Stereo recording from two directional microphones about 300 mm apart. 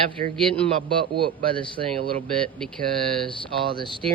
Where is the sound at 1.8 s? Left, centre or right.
Right.